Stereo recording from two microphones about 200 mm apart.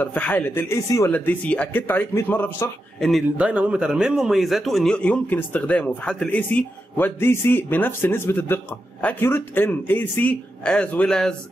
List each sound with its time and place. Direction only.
0.0 s speech: 10° left (ahead or behind)